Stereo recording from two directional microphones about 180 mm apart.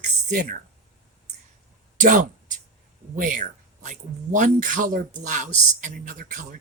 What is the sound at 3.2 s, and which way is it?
Speech, 45° right (ahead or behind).